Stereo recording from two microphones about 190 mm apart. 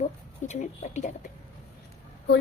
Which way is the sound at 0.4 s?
35° left (ahead or behind).